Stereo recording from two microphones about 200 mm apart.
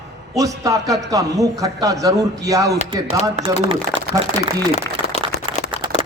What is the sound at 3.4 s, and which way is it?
Speech, 30° right (ahead or behind).